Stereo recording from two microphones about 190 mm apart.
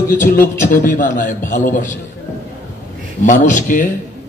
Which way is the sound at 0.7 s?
45° left (ahead or behind).